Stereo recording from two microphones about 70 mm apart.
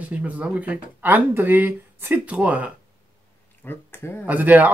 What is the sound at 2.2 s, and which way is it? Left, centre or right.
Speech, centre.